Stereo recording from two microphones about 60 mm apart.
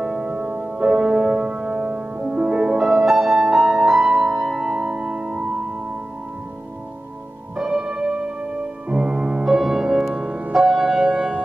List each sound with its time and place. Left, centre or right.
0.0 s music: centre
7.5 s music: centre
10.1 s music: right